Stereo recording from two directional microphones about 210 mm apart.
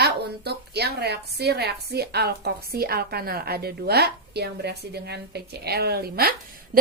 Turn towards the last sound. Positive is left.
turn(degrees=-45)  # may be behind; listen again after turning